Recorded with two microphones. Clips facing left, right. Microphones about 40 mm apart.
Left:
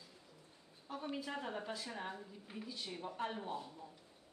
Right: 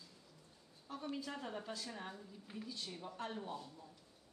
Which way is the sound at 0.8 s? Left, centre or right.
Centre.